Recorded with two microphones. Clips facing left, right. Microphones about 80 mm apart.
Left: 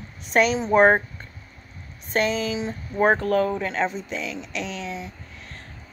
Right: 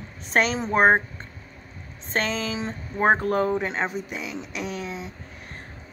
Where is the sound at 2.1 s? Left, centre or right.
Right.